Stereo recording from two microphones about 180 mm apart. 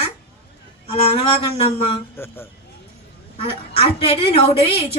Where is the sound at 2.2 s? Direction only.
15° left (ahead or behind).